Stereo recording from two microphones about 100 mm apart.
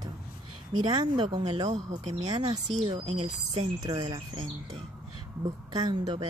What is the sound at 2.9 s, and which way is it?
Speech, 90° right.